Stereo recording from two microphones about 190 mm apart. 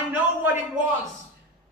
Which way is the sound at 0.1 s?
10° right (ahead or behind).